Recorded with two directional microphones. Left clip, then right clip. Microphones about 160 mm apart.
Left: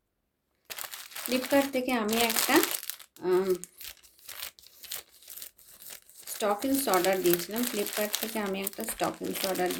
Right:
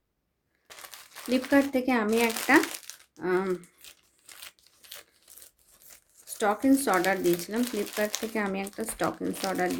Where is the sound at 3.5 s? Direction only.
5° right (ahead or behind).